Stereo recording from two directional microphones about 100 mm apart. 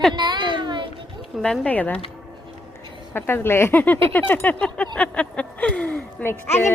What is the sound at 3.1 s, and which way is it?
Speech, 25° left (ahead or behind).